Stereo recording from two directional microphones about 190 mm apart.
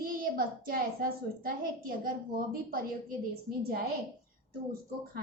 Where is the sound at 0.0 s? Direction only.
50° right (ahead or behind).